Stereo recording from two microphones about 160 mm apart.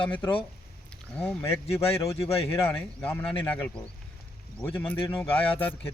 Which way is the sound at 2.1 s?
35° left (ahead or behind).